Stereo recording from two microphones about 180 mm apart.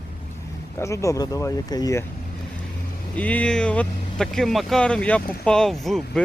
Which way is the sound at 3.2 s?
10° left (ahead or behind).